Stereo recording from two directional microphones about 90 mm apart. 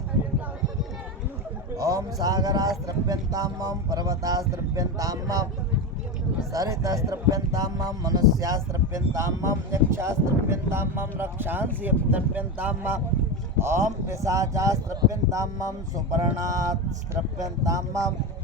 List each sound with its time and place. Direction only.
1.7 s speech: 40° right (ahead or behind)
6.5 s speech: 40° right (ahead or behind)